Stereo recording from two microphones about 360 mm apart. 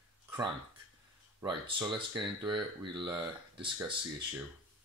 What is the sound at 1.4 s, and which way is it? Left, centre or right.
Speech, centre.